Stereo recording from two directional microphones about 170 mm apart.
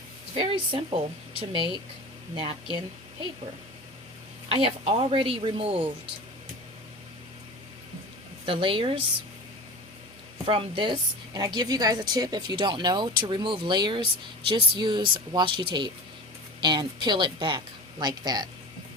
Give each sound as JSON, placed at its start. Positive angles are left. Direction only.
{"t": 0.3, "sound": "a woman's voice", "side_deg": -30}
{"t": 4.4, "sound": "a woman's voice", "side_deg": -35}
{"t": 8.4, "sound": "a woman's voice", "side_deg": -30}
{"t": 10.4, "sound": "a woman's voice", "side_deg": -30}